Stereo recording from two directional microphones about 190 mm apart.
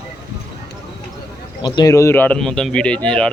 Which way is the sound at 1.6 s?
20° left (ahead or behind).